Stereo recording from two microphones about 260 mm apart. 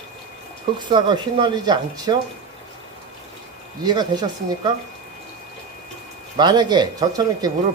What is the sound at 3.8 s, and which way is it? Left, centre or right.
Speech, centre.